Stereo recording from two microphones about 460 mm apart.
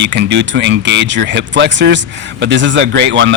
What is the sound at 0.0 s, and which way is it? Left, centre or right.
Speech, right.